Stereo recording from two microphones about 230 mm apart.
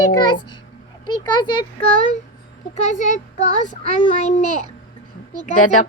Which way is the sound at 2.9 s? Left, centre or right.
Left.